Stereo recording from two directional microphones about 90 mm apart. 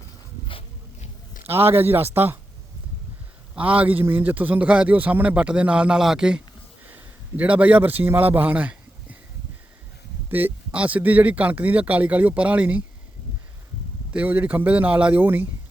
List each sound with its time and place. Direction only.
1.5 s speech: 25° right (ahead or behind)
3.5 s a man's voice: 15° right (ahead or behind)
6.8 s a man's voice: 20° right (ahead or behind)
10.2 s a man's voice: 20° right (ahead or behind)
14.1 s a man's voice: 15° right (ahead or behind)